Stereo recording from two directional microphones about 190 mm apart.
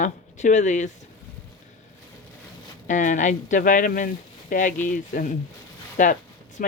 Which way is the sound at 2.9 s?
40° left (ahead or behind).